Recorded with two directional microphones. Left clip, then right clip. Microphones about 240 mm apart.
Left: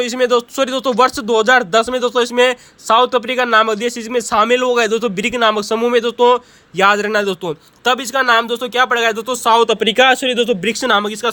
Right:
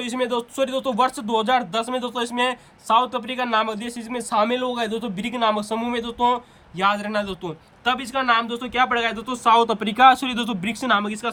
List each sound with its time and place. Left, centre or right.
0.0 s a man's voice: centre; by 9.6 s left
9.6 s a man's voice: centre
10.8 s speech: centre